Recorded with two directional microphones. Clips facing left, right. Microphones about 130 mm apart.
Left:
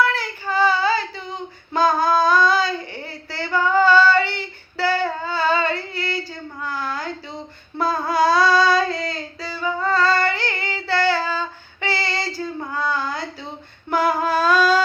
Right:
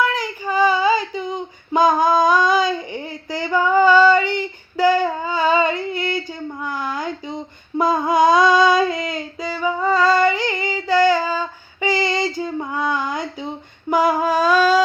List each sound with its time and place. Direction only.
0.0 s child singing: 15° right (ahead or behind)
1.7 s a sound: 15° right (ahead or behind)
12.4 s female singing: 15° right (ahead or behind)